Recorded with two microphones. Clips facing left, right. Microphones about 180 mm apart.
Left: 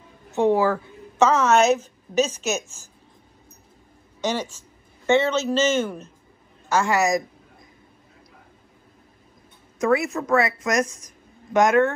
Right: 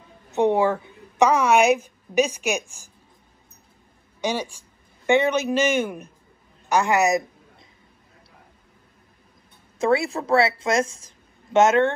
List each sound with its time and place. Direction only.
0.3 s a woman's voice: 20° right (ahead or behind)
4.2 s speech: 10° right (ahead or behind)
9.8 s a woman's voice: 30° right (ahead or behind)